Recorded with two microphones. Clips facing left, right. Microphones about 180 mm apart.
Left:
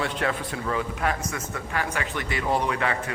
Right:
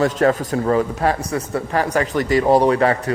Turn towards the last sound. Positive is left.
turn(degrees=-40)  # may be behind; listen again after turning